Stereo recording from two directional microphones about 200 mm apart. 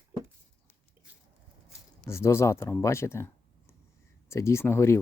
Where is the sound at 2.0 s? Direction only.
15° left (ahead or behind).